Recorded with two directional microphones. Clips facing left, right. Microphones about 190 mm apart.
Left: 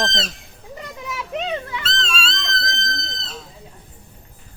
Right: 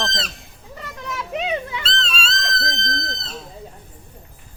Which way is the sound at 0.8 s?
5° left (ahead or behind).